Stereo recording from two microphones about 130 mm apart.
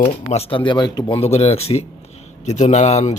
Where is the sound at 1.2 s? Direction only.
55° left (ahead or behind).